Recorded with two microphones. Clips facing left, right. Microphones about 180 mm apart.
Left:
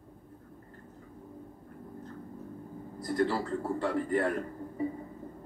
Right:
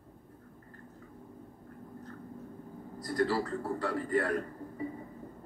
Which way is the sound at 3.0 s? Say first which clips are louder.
Left 2 dB; 25° left (ahead or behind).